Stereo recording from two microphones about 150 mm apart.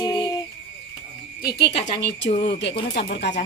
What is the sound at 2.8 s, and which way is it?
Speech, 90° left.